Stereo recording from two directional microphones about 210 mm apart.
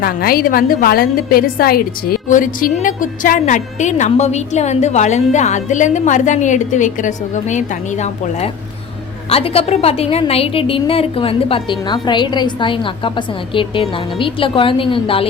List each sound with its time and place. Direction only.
0.0 s a woman's voice: 45° left (ahead or behind); by 15.3 s 25° left (ahead or behind)